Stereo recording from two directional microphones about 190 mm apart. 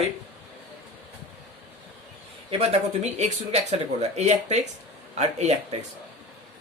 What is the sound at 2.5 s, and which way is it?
Speech, 35° right (ahead or behind).